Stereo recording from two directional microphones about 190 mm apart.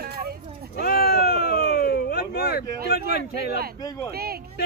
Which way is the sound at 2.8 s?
55° left (ahead or behind).